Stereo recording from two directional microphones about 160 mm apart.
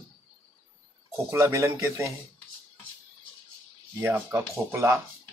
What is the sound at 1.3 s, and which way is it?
Speech, 15° right (ahead or behind).